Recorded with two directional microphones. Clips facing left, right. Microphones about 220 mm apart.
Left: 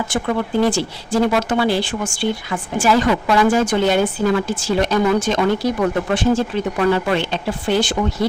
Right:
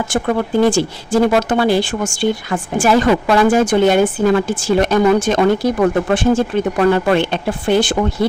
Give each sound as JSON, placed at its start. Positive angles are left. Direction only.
{"t": 0.1, "sound": "speech", "side_deg": -45}